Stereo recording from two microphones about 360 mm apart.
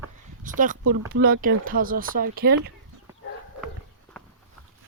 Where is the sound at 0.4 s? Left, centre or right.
Right.